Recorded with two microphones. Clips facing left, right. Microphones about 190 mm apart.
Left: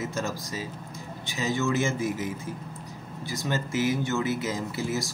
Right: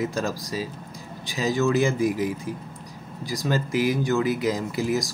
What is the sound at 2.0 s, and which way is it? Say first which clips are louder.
Speech: right 5 dB; 20° left (ahead or behind).